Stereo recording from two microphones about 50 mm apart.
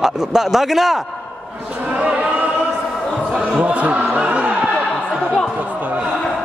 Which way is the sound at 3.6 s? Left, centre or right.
Right.